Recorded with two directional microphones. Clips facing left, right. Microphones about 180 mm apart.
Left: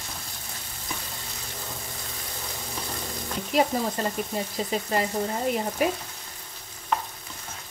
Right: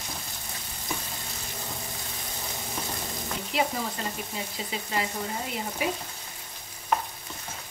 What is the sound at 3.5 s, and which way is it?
Stir, 45° left (ahead or behind).